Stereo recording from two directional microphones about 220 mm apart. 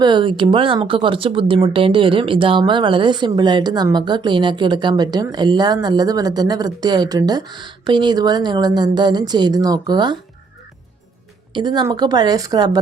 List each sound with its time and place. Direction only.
0.0 s speech: 20° right (ahead or behind)
11.5 s speech: 20° right (ahead or behind)